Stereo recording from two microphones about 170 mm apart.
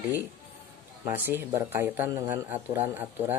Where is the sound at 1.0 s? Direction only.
10° right (ahead or behind).